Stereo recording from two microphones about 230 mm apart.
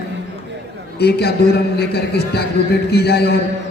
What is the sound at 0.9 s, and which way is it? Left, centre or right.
A man's voice, left.